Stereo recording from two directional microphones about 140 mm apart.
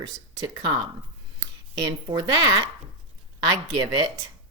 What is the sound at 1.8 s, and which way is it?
Speech, 30° right (ahead or behind).